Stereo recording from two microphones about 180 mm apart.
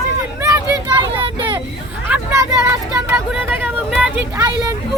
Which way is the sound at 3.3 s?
10° right (ahead or behind).